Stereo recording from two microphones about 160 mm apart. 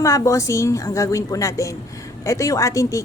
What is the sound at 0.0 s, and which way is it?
Speech, 20° left (ahead or behind).